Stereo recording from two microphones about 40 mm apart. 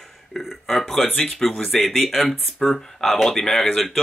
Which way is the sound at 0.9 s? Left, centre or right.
Centre.